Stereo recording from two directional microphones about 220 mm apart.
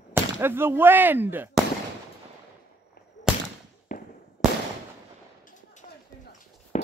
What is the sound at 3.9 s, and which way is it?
Fireworks, 35° left (ahead or behind).